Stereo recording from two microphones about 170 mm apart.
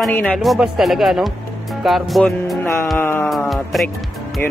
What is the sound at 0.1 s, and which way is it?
Speech, 5° left (ahead or behind).